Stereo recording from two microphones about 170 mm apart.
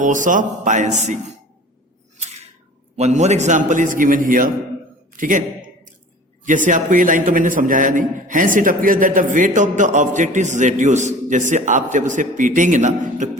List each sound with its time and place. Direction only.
0.0 s a man's voice: 50° right (ahead or behind)
2.9 s a man's voice: 40° right (ahead or behind)
5.1 s a sound: 50° right (ahead or behind)
6.4 s a man's voice: 50° right (ahead or behind)